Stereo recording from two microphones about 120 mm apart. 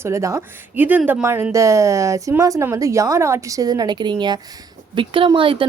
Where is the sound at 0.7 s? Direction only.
15° right (ahead or behind).